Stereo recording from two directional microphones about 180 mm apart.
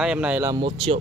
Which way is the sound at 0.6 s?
30° right (ahead or behind).